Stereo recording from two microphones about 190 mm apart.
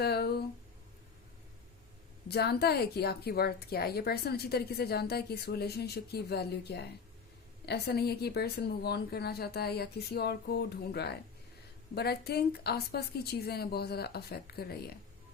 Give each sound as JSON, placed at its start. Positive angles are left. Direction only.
{"t": 0.0, "sound": "speech", "side_deg": 55}
{"t": 2.2, "sound": "a woman's voice", "side_deg": 55}